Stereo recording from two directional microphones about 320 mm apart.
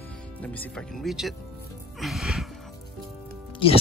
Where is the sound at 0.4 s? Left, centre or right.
Centre.